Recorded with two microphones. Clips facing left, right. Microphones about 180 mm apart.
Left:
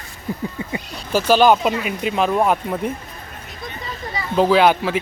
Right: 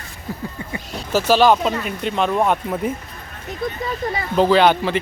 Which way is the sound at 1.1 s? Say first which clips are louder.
Left 1 dB; centre (ahead or behind).